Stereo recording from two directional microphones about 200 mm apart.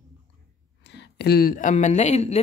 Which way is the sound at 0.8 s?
60° left (ahead or behind).